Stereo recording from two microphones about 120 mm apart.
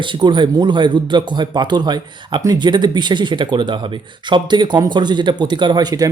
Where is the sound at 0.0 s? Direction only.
40° right (ahead or behind).